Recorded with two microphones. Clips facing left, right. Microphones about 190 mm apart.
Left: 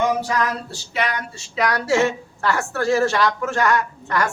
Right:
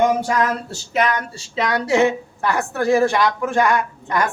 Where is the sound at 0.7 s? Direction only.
45° right (ahead or behind).